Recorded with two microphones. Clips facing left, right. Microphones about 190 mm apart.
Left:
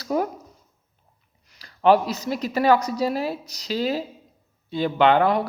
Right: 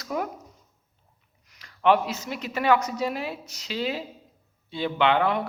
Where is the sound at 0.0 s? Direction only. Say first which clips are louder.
Left 6 dB; 35° left (ahead or behind).